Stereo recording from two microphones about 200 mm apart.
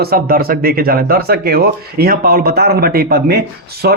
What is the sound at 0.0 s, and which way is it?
Speech, 50° right (ahead or behind).